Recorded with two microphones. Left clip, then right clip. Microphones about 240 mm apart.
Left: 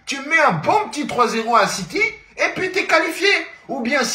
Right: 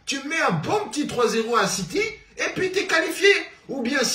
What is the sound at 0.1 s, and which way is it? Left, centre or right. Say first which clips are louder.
Speech: left 7 dB; centre.